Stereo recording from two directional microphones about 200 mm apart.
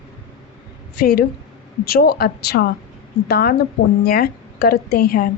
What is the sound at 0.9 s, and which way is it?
A woman's voice, 50° left (ahead or behind).